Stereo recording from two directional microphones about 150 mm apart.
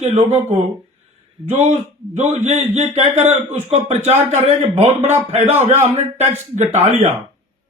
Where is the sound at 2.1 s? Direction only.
50° right (ahead or behind).